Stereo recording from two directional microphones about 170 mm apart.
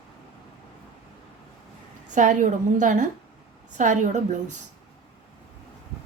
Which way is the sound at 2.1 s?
50° right (ahead or behind).